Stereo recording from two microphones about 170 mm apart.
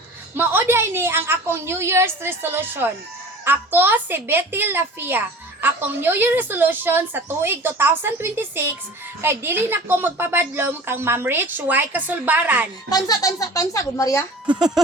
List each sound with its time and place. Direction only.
0.3 s a woman's voice: 15° right (ahead or behind)
12.9 s a child's voice: 20° left (ahead or behind)